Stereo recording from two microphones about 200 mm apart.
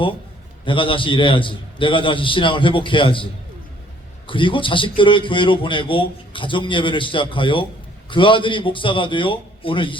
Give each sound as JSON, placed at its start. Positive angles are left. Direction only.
{"t": 0.6, "sound": "a man's voice", "side_deg": 25}
{"t": 4.3, "sound": "a man's voice", "side_deg": 25}